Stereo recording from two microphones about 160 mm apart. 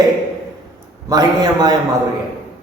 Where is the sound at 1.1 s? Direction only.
25° right (ahead or behind).